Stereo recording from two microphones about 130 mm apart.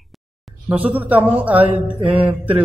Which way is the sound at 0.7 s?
10° right (ahead or behind).